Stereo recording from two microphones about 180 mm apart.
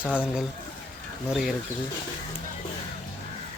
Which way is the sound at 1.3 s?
Centre (ahead or behind).